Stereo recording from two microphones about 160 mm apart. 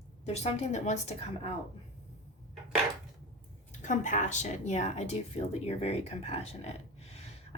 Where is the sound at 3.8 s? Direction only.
50° left (ahead or behind).